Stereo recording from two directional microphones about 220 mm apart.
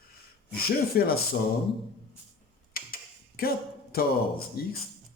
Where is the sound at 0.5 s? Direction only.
45° left (ahead or behind).